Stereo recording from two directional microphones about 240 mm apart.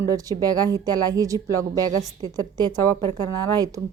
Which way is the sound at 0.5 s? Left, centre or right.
Centre.